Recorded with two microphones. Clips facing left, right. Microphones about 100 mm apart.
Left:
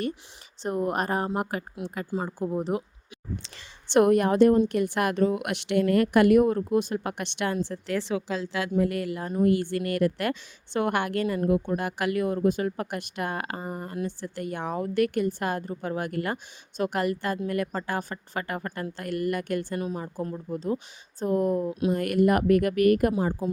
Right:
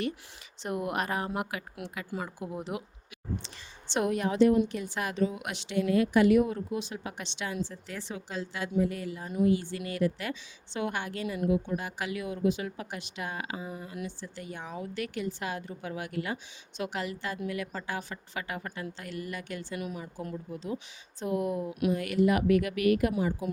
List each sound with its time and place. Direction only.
0.6 s speech: 35° left (ahead or behind)
2.0 s speech: 30° left (ahead or behind)
2.4 s speech: 40° left (ahead or behind)
3.4 s a woman's voice: 60° left (ahead or behind); by 8.7 s 90° left
8.8 s a woman's voice: 65° left (ahead or behind)
11.3 s a woman's voice: 50° left (ahead or behind)
14.2 s a woman's voice: 60° left (ahead or behind)
19.8 s speech: 35° left (ahead or behind)
21.7 s speech: 30° left (ahead or behind)
21.9 s a woman's voice: 55° left (ahead or behind)
23.4 s speech: 30° left (ahead or behind)